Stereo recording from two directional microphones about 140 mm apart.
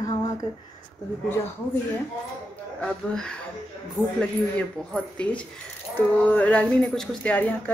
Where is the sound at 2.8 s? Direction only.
5° left (ahead or behind).